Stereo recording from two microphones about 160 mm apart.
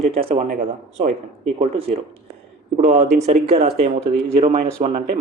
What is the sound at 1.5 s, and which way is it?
Speech, 35° right (ahead or behind).